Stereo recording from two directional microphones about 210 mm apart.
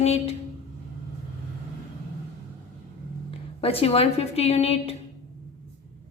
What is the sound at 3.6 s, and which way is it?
A woman's voice, 25° left (ahead or behind).